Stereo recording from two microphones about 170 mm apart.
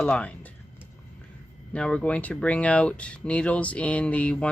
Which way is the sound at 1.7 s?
5° left (ahead or behind).